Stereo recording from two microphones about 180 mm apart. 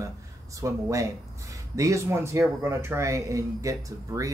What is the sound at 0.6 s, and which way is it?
Speech, 15° right (ahead or behind).